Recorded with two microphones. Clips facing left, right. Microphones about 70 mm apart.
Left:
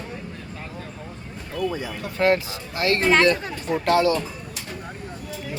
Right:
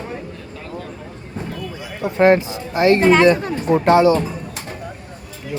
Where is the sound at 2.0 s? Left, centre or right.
Right.